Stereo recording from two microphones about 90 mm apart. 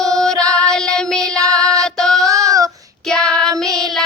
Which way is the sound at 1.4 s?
40° right (ahead or behind).